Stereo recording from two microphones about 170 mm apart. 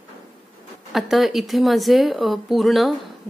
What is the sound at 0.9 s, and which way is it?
Speech, centre (ahead or behind).